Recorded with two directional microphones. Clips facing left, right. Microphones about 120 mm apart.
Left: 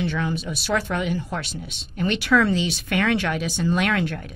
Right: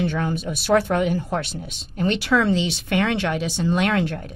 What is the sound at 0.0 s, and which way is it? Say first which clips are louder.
Speech: right 2 dB; 45° right (ahead or behind).